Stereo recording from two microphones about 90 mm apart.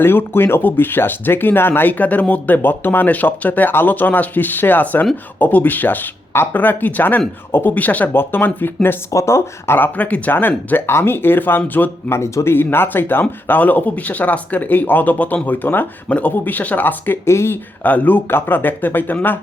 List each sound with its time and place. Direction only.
0.0 s speech: 25° left (ahead or behind)
9.0 s speech: 35° left (ahead or behind)